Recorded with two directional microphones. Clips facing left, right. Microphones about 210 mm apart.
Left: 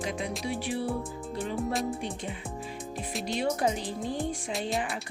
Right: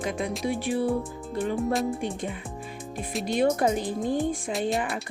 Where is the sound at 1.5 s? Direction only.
Centre (ahead or behind).